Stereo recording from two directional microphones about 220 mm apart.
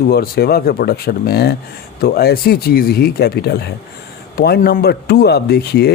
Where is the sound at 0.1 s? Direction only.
45° left (ahead or behind).